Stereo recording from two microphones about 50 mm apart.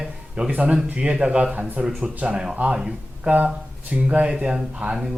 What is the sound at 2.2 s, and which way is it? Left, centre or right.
Speech, centre.